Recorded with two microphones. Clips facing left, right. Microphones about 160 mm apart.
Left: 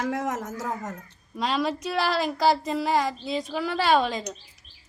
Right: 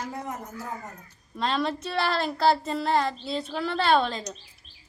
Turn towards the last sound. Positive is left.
turn(degrees=15)  # may be behind; listen again after turning